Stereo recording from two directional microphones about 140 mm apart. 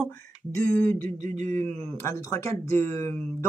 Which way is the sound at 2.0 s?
20° left (ahead or behind).